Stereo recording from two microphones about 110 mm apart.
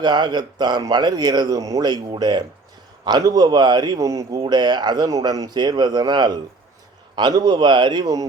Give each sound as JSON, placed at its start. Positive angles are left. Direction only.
{"t": 0.0, "sound": "speech", "side_deg": -40}